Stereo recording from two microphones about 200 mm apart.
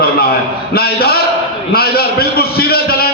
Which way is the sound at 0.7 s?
50° left (ahead or behind).